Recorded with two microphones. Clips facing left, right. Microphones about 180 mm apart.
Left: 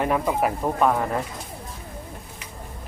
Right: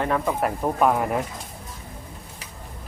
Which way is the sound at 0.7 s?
5° right (ahead or behind).